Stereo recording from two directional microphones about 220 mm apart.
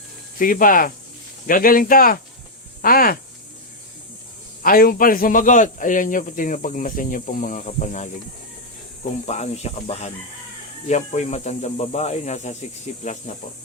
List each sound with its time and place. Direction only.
0.3 s speech: 40° left (ahead or behind)
4.6 s speech: 40° left (ahead or behind)
9.2 s speech: 30° left (ahead or behind)